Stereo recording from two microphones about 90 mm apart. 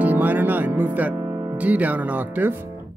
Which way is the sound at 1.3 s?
45° right (ahead or behind).